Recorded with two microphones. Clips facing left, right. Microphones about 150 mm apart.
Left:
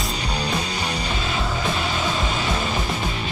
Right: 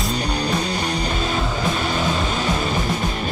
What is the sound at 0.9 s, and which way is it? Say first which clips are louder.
Music: right 3 dB; 45° right (ahead or behind).